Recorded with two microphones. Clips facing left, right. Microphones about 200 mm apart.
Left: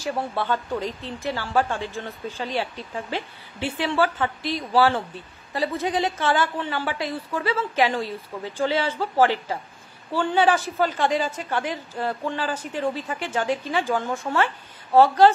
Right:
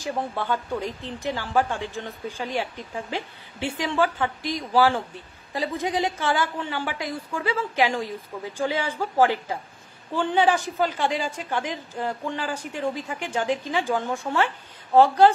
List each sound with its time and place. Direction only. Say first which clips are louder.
0.0 s a woman's voice: left 1 dB; 15° right (ahead or behind)